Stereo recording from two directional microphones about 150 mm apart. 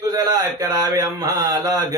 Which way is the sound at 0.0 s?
25° right (ahead or behind).